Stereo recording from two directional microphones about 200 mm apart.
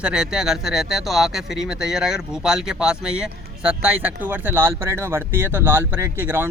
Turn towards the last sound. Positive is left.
turn(degrees=-10)  # may be behind; listen again after turning